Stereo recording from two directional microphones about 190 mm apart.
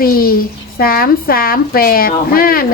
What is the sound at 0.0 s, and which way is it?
A child's voice, 50° left (ahead or behind).